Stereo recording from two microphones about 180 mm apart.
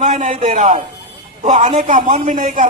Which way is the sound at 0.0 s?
40° right (ahead or behind).